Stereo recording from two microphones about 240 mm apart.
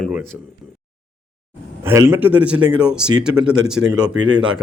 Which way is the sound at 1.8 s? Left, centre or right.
Centre.